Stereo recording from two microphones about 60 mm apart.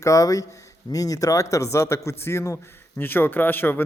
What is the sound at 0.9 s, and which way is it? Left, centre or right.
Speech, left.